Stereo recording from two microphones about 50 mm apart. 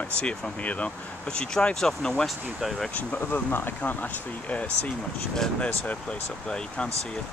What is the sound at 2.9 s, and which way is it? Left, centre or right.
Speech, left.